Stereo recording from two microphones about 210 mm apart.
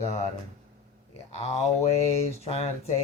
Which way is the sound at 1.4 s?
30° left (ahead or behind).